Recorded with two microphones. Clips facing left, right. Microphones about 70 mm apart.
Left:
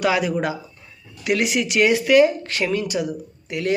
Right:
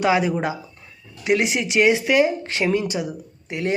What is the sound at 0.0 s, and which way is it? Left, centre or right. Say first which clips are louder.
Speech: right 1 dB; right.